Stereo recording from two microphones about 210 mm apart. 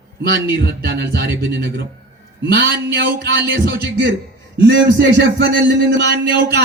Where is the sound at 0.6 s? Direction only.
50° right (ahead or behind).